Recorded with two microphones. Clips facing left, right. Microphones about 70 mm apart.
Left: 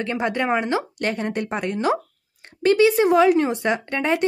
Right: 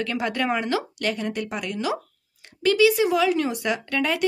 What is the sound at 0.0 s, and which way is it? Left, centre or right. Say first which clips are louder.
A woman's voice: left 2 dB; left.